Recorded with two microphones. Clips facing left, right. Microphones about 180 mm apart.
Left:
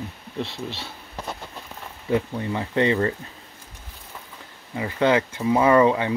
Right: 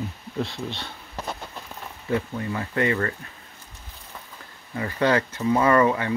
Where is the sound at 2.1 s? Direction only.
20° left (ahead or behind).